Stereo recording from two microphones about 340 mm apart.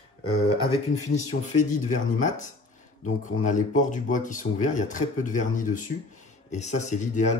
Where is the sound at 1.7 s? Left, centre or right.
Left.